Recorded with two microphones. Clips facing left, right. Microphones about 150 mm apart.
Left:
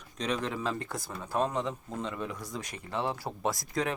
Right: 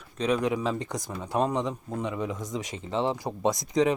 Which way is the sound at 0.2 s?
10° right (ahead or behind).